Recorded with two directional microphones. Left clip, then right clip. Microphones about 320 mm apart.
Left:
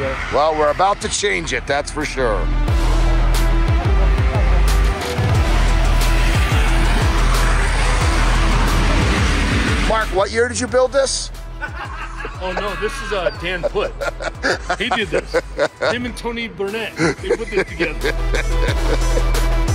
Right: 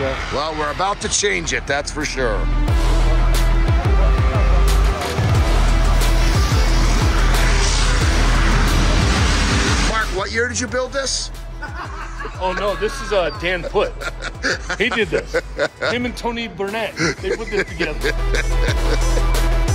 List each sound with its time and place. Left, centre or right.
0.4 s speech: centre
3.3 s music: centre
7.6 s music: centre
9.2 s vehicle: centre
12.8 s speech: right
14.0 s speech: centre
16.3 s speech: right
17.0 s speech: centre